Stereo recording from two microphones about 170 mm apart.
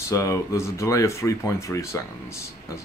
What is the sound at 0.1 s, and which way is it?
Speech, 20° left (ahead or behind).